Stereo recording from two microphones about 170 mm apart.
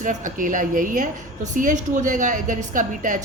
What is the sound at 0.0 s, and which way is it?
Speech, 50° right (ahead or behind).